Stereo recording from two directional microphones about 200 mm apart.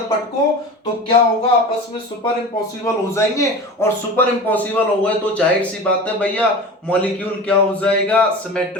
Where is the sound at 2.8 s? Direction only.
15° left (ahead or behind).